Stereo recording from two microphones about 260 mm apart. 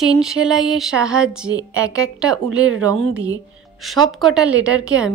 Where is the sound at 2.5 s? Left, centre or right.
Right.